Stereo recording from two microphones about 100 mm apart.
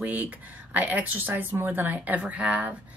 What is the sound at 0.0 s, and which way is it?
Speech, 15° right (ahead or behind).